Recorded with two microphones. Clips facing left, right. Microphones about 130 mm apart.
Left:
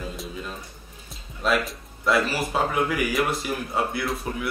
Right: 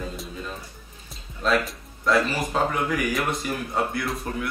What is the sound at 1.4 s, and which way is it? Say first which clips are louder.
Speech: right 1 dB; 5° left (ahead or behind).